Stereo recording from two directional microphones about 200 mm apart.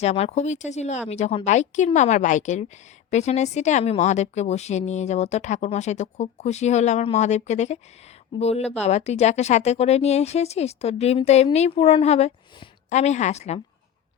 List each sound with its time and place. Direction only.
0.0 s a woman's voice: 30° left (ahead or behind)